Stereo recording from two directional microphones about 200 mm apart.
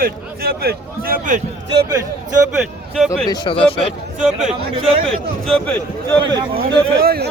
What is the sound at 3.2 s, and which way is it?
Speech, 20° left (ahead or behind).